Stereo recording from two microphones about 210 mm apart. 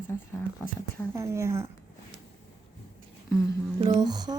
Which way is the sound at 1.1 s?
15° right (ahead or behind).